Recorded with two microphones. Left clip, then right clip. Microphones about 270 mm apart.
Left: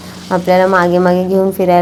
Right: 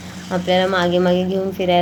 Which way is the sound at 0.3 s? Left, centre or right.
Left.